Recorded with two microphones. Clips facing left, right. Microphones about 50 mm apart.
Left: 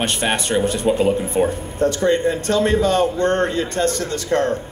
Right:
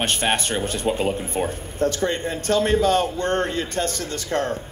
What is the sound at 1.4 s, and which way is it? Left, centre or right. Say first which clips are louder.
Speech: left 3 dB; left.